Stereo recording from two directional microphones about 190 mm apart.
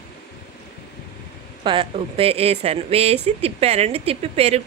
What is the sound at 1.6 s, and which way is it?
Speech, 30° right (ahead or behind).